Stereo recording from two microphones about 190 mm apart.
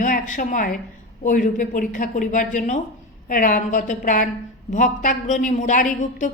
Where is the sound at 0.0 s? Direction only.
45° left (ahead or behind).